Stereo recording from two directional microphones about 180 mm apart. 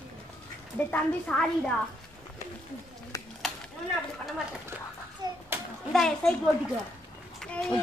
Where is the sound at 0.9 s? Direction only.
5° left (ahead or behind).